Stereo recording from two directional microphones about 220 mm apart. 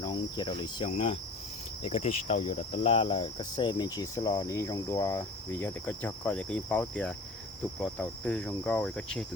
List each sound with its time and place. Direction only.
0.0 s insect: 20° left (ahead or behind)
1.8 s cricket: 25° left (ahead or behind); by 9.2 s 5° left (ahead or behind)